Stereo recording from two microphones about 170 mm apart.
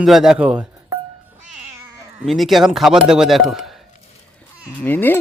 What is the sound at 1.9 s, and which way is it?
Cat, 15° right (ahead or behind).